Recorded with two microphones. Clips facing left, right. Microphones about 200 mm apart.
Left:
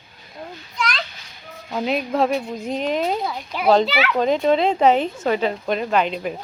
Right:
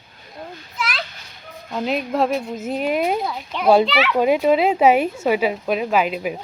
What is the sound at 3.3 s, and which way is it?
Speech, 5° left (ahead or behind).